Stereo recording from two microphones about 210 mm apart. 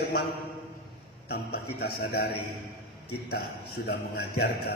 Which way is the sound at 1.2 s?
50° left (ahead or behind).